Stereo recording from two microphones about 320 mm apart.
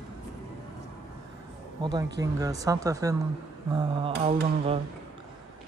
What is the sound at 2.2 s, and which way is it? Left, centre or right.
Speech, centre.